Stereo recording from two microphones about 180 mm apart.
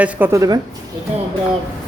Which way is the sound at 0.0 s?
15° right (ahead or behind).